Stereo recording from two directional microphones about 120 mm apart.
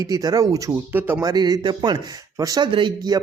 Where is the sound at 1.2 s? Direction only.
35° right (ahead or behind).